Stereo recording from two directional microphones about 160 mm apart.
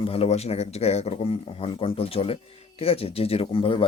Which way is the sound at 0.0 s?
40° left (ahead or behind).